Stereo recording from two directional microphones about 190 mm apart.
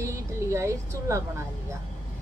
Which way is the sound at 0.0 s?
15° right (ahead or behind).